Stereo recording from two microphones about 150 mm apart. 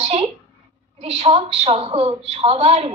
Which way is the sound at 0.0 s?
45° right (ahead or behind).